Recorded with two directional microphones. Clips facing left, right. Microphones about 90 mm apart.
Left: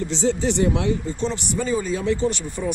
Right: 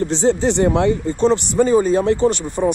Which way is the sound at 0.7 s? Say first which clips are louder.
Right 6 dB; 55° right (ahead or behind).